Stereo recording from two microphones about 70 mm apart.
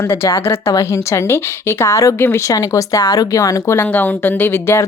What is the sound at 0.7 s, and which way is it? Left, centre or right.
A woman's voice, left.